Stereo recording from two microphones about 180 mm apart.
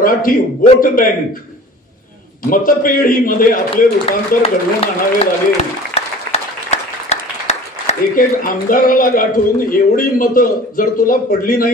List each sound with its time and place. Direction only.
0.0 s a man's voice: 50° left (ahead or behind)
2.5 s a man's voice: 50° left (ahead or behind)
3.7 s a man's voice: 30° left (ahead or behind); by 11.7 s 50° left (ahead or behind)